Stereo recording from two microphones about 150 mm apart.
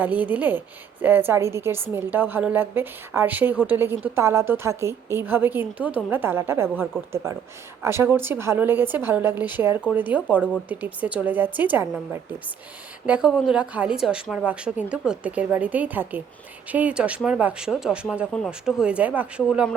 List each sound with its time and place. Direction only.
0.0 s a woman's voice: 10° right (ahead or behind)